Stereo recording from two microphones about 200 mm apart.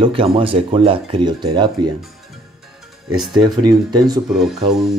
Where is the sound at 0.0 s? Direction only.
25° right (ahead or behind).